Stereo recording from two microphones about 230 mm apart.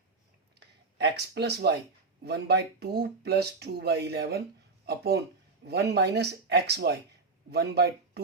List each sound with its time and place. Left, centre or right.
0.9 s speech: right